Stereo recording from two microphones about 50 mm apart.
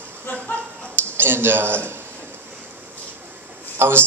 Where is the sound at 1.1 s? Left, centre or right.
Right.